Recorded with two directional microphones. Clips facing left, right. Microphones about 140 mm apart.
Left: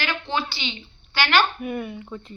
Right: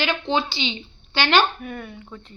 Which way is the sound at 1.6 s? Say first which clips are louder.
Left 5 dB; 5° left (ahead or behind).